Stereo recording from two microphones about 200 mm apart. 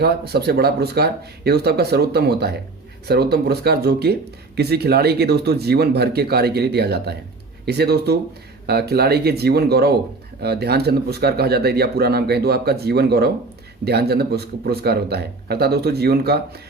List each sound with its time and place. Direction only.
0.0 s speech: 55° right (ahead or behind)